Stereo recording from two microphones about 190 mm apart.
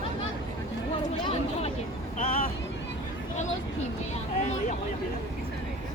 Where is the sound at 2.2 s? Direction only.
50° left (ahead or behind).